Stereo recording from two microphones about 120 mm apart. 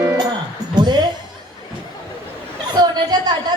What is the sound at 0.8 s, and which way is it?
Chuckle, 35° right (ahead or behind).